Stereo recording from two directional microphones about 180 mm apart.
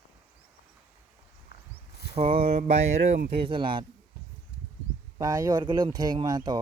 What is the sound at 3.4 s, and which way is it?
Speech, 25° right (ahead or behind).